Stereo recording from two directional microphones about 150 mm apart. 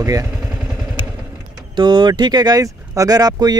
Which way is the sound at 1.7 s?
30° right (ahead or behind).